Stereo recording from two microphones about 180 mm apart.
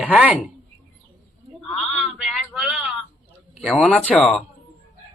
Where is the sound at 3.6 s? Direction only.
5° left (ahead or behind).